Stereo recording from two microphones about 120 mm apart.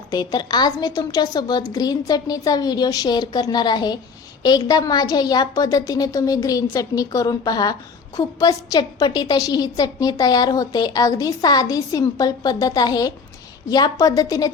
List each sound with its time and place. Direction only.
0.1 s a woman's voice: 30° left (ahead or behind)